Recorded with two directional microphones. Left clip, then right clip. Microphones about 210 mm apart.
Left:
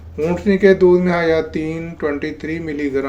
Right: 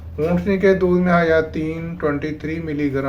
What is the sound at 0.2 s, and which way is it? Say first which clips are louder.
Speech: left 3 dB; 45° left (ahead or behind).